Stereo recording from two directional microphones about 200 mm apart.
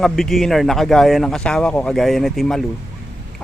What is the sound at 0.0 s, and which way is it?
Speech, centre (ahead or behind).